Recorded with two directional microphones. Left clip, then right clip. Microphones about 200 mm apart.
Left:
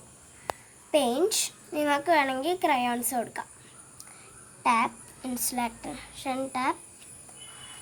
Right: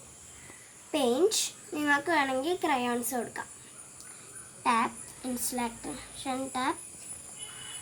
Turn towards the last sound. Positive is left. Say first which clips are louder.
# left 3 dB
turn(degrees=20)  # may be behind; listen again after turning